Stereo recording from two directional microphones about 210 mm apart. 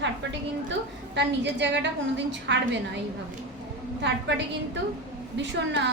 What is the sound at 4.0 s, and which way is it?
Speech, 55° right (ahead or behind).